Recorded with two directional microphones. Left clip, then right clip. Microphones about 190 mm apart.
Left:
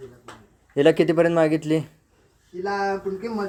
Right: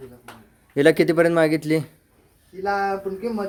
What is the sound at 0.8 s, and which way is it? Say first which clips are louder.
Speech: right 1 dB; 20° right (ahead or behind).